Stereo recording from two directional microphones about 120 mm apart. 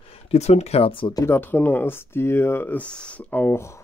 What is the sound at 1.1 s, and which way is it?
Speech, 20° left (ahead or behind).